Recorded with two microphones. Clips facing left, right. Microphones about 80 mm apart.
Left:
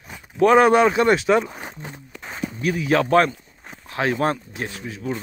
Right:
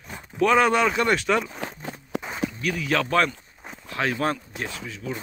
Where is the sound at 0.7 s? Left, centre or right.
Left.